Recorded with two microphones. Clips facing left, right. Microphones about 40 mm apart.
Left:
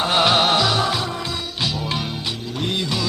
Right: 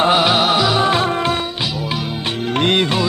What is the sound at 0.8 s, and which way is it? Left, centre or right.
Music, right.